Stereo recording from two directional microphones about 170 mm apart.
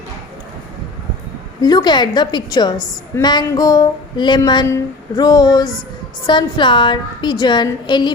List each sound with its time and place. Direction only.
1.6 s a woman's voice: 25° left (ahead or behind)